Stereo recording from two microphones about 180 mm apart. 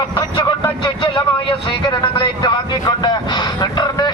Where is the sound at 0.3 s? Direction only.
25° left (ahead or behind).